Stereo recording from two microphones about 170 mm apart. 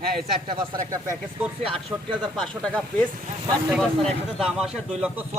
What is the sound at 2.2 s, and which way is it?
Speech, 5° left (ahead or behind).